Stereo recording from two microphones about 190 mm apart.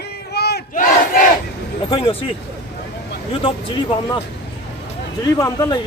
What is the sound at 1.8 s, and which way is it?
Speech, 30° left (ahead or behind).